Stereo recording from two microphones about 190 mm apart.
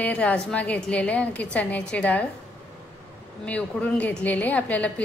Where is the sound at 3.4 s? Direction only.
5° left (ahead or behind).